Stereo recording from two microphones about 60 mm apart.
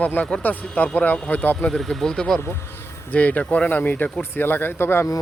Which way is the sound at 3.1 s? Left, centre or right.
Left.